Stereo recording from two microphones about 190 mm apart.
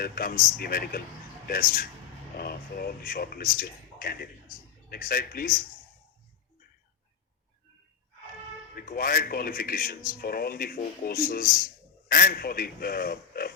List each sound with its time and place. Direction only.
0.0 s speech: 50° left (ahead or behind)
8.7 s speech: 50° left (ahead or behind)